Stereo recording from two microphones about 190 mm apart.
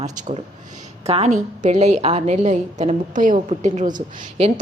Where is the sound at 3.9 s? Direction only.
25° right (ahead or behind).